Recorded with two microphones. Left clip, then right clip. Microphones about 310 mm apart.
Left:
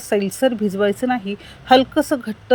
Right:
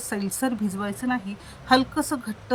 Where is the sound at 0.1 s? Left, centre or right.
Centre.